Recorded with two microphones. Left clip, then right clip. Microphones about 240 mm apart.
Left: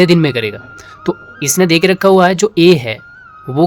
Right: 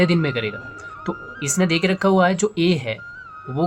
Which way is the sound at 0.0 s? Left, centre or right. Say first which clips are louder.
Left 9 dB; left.